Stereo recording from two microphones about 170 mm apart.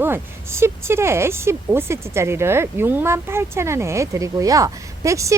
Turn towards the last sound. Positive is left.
turn(degrees=-20)  # may be behind; listen again after turning